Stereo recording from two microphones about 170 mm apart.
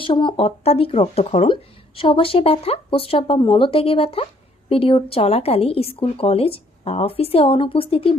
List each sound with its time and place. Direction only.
0.0 s a woman's voice: 30° left (ahead or behind)